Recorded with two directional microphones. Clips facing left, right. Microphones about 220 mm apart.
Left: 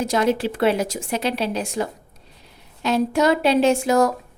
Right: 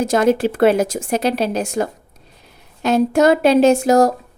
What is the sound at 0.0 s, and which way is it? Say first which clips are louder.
A woman's voice: right 5 dB; 45° right (ahead or behind).